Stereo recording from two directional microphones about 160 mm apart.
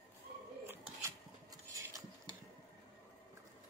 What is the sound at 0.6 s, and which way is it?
Dishes, 20° right (ahead or behind).